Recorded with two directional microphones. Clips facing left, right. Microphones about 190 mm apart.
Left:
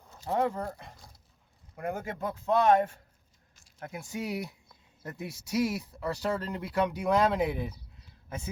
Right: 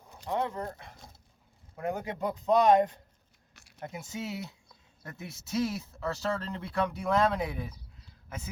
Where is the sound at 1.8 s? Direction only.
20° right (ahead or behind).